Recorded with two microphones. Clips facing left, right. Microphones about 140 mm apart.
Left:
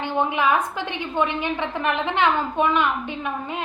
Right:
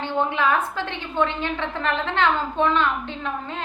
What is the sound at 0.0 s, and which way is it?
A woman's voice, 15° left (ahead or behind).